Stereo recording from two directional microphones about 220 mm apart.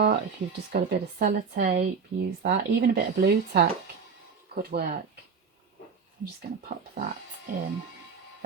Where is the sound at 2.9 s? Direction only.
45° right (ahead or behind).